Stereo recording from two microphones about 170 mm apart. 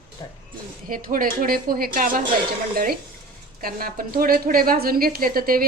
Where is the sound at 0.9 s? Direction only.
55° right (ahead or behind).